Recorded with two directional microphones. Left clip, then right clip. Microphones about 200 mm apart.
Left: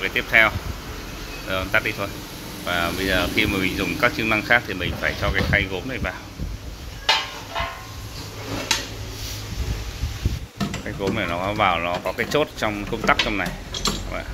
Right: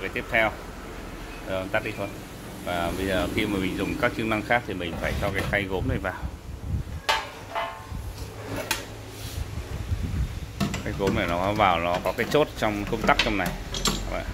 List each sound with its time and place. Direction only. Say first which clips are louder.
0.0 s speech: left 7 dB; 5° right (ahead or behind)
1.5 s speech: left 6 dB; 5° right (ahead or behind)
10.9 s speech: left 1 dB; 20° right (ahead or behind)
13.3 s mechanisms: left 2 dB; 15° right (ahead or behind)